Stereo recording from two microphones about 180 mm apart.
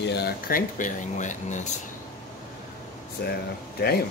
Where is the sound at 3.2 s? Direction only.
60° left (ahead or behind).